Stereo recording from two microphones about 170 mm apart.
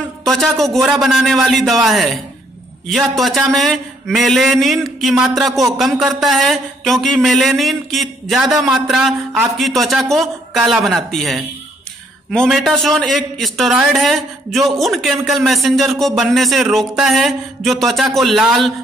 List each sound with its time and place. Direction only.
0.2 s a man's voice: centre (ahead or behind)